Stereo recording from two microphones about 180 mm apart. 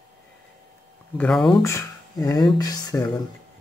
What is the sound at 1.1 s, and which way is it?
Speech, 5° left (ahead or behind).